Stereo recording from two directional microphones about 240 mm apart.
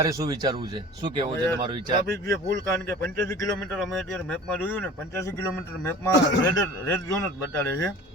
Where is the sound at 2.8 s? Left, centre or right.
Centre.